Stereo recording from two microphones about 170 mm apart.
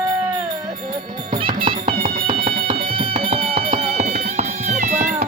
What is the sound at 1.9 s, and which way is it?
Music, 55° right (ahead or behind).